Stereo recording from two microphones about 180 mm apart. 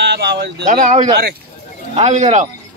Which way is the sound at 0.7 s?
45° right (ahead or behind).